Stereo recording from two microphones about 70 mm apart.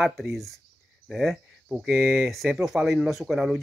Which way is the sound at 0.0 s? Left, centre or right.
Centre.